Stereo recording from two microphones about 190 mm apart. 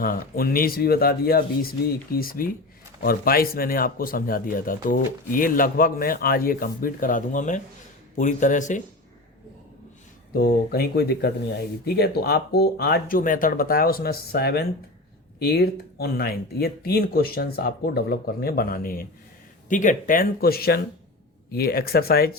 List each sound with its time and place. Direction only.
0.0 s a man's voice: 50° left (ahead or behind)
10.3 s speech: 55° left (ahead or behind)